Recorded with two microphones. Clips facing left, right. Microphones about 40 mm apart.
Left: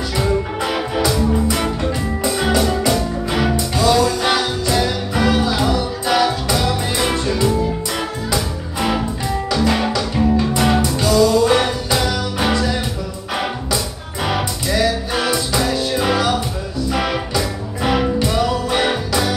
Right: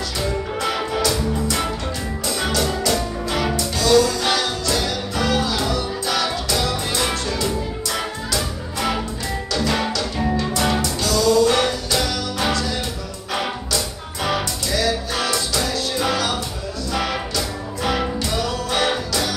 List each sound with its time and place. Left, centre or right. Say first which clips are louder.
0.7 s music: left 5 dB; centre
9.9 s music: left 5 dB; left
14.7 s music: left 4 dB; left